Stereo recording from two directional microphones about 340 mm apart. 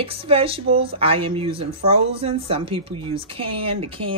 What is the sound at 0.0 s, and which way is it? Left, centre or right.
Speech, centre.